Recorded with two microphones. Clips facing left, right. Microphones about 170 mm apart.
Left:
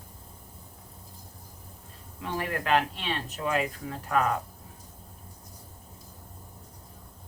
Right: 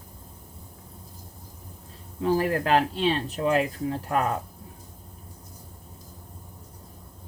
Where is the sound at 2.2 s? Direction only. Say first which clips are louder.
Right 9 dB; 35° right (ahead or behind).